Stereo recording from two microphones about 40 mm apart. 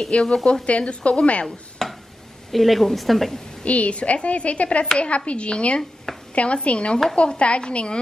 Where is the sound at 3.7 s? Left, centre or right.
Left.